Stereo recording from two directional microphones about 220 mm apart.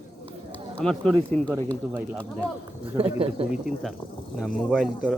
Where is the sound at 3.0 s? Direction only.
25° right (ahead or behind).